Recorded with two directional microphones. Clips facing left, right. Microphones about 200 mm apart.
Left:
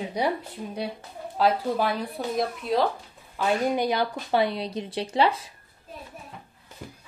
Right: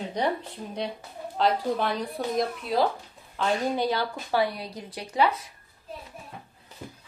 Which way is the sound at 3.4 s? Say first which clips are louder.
Left 2 dB; 15° left (ahead or behind).